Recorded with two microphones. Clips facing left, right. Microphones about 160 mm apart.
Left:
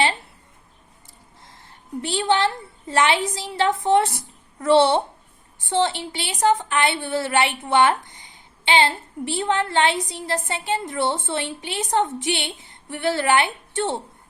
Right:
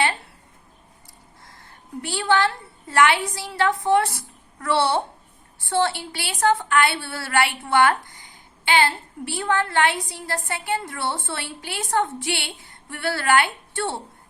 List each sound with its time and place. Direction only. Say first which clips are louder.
1.5 s a woman's voice: left 4 dB; 25° left (ahead or behind)